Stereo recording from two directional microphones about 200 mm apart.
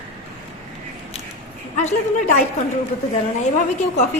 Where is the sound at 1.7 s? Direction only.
35° left (ahead or behind).